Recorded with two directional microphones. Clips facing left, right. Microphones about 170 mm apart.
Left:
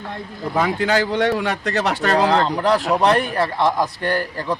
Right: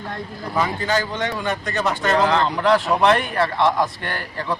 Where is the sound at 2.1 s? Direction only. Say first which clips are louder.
Left 2 dB; 35° left (ahead or behind).